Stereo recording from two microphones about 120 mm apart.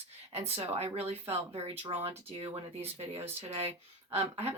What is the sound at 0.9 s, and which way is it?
Speech, 60° right (ahead or behind).